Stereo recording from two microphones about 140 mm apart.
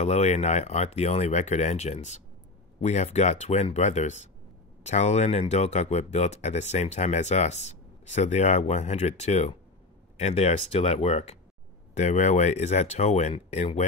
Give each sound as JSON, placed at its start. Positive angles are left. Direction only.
{"t": 0.0, "sound": "speech", "side_deg": 55}